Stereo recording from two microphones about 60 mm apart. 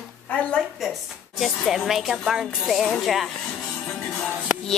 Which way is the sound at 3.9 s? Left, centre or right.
Centre.